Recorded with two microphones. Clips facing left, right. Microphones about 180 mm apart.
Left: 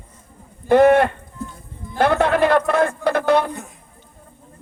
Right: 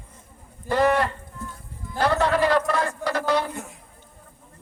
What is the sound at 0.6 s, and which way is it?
A man's voice, 55° left (ahead or behind).